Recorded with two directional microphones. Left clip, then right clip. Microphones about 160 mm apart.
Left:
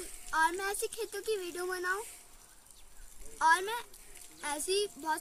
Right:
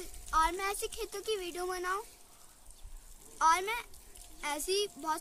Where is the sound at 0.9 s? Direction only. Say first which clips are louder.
Left 1 dB; 35° right (ahead or behind).